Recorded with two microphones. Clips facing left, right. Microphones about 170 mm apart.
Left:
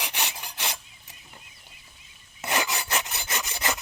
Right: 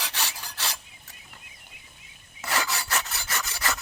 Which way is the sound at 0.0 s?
20° left (ahead or behind).